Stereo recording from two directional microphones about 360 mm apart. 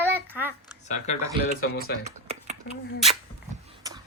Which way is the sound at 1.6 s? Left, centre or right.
Left.